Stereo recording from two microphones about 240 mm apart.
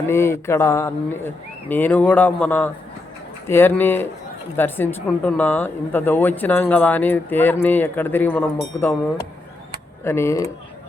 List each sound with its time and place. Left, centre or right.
0.1 s speech: centre